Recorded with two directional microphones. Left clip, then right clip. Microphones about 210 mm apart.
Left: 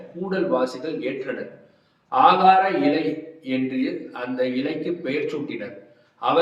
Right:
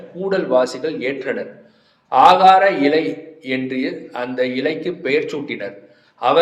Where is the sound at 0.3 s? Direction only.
30° right (ahead or behind).